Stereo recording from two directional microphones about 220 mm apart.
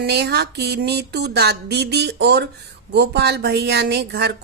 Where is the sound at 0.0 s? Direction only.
50° right (ahead or behind).